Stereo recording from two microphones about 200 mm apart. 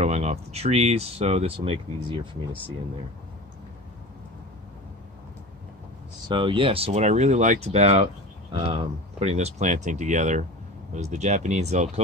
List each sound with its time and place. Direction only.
0.0 s speech: 35° right (ahead or behind)
6.2 s speech: 25° right (ahead or behind)